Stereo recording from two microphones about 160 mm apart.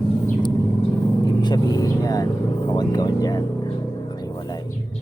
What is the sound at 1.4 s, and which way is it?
Speech, 25° left (ahead or behind).